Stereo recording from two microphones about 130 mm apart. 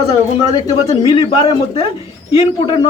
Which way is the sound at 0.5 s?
30° left (ahead or behind).